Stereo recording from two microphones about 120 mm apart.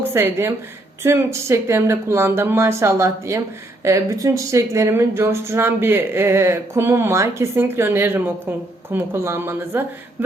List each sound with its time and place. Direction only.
0.1 s speech: 20° right (ahead or behind)